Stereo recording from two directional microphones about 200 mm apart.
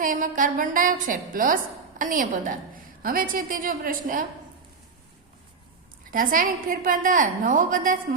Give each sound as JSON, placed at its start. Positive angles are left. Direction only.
{"t": 0.0, "sound": "a woman's voice", "side_deg": -45}
{"t": 6.1, "sound": "a woman's voice", "side_deg": -45}